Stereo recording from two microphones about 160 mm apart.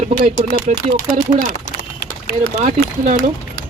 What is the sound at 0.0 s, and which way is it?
Speech, 45° right (ahead or behind).